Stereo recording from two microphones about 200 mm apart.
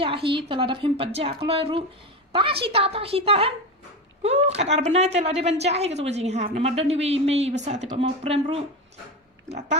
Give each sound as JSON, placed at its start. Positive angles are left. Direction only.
{"t": 0.0, "sound": "a woman's voice", "side_deg": -25}